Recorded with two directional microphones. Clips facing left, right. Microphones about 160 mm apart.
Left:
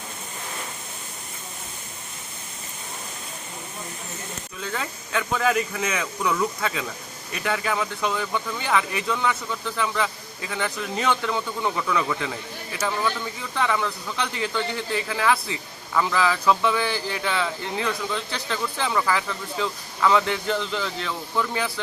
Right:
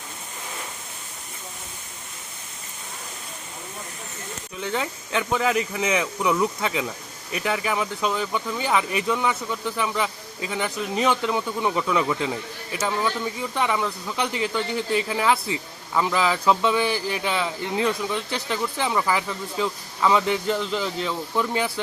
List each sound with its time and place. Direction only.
4.5 s speech: 20° right (ahead or behind)